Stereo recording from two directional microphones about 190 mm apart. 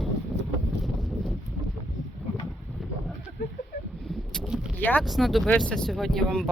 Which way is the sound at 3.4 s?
55° left (ahead or behind).